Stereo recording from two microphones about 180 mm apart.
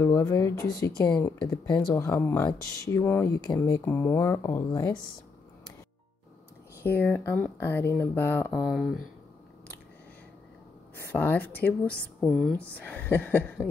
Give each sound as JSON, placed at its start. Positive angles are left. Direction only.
{"t": 0.0, "sound": "speech", "side_deg": 20}
{"t": 6.8, "sound": "speech", "side_deg": 10}
{"t": 8.5, "sound": "speech", "side_deg": 0}
{"t": 11.0, "sound": "speech", "side_deg": 10}